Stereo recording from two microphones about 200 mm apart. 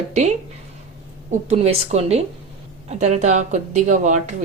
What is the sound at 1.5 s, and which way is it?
A woman's voice, 30° right (ahead or behind).